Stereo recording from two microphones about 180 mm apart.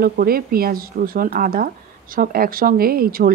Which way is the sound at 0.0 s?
55° right (ahead or behind).